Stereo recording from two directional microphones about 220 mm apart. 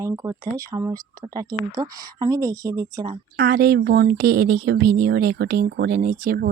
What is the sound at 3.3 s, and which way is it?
Speech, 45° right (ahead or behind).